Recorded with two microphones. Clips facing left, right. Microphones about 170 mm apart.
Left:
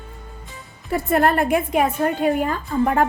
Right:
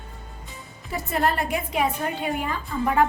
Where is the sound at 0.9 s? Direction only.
55° left (ahead or behind).